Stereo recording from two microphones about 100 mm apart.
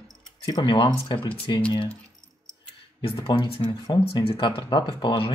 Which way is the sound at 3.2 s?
55° left (ahead or behind).